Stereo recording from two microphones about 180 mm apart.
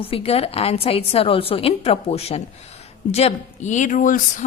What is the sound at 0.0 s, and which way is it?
A woman's voice, 30° left (ahead or behind).